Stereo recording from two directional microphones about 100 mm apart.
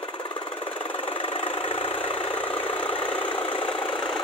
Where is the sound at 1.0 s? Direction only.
70° left (ahead or behind).